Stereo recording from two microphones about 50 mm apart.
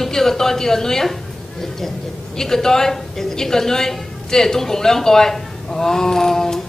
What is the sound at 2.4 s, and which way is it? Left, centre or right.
A woman's voice, centre.